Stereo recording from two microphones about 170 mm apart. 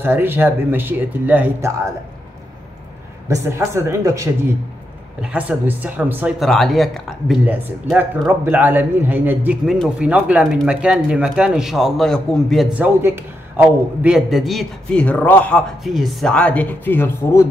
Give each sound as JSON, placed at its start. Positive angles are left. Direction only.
{"t": 0.0, "sound": "speech", "side_deg": -15}
{"t": 3.4, "sound": "speech", "side_deg": -15}
{"t": 6.4, "sound": "speech", "side_deg": 0}
{"t": 7.4, "sound": "speech", "side_deg": -10}
{"t": 15.8, "sound": "speech", "side_deg": 0}